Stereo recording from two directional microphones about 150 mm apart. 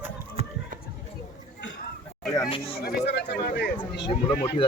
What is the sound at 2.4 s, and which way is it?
Chatter, 35° left (ahead or behind).